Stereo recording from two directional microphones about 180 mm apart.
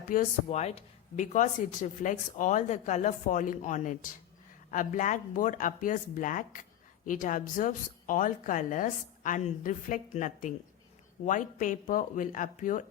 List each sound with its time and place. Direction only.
0.1 s speech: 45° left (ahead or behind)